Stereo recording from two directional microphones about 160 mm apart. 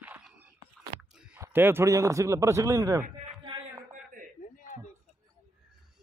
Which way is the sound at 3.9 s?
55° right (ahead or behind).